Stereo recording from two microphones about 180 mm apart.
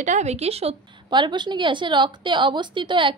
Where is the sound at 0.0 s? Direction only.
40° right (ahead or behind).